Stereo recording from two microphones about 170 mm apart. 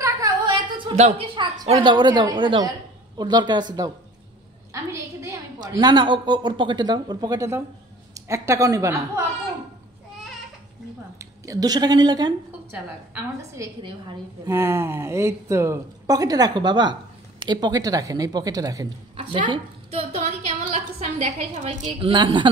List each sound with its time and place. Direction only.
0.0 s a sound: 25° right (ahead or behind)
0.9 s speech: 35° right (ahead or behind)
5.6 s speech: 25° right (ahead or behind)
11.1 s speech: 20° right (ahead or behind)
13.6 s a woman's voice: 20° right (ahead or behind); by 21.9 s 45° right (ahead or behind)
22.0 s speech: 30° right (ahead or behind)